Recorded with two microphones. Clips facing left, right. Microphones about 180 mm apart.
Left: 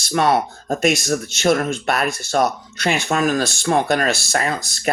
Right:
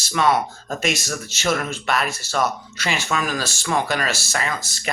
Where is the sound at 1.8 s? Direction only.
55° left (ahead or behind).